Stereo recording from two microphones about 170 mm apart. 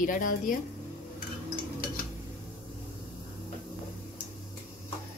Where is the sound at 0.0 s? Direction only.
50° left (ahead or behind).